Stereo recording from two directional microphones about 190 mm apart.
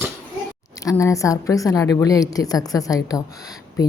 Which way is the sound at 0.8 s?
15° left (ahead or behind).